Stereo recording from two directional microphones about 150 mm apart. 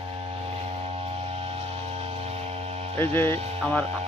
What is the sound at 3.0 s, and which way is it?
Speech, 15° left (ahead or behind).